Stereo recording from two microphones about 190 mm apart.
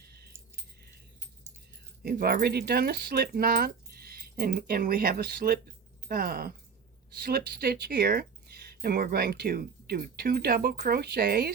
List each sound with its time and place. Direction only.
0.0 s keys jangling: 55° right (ahead or behind)
2.0 s speech: 55° right (ahead or behind)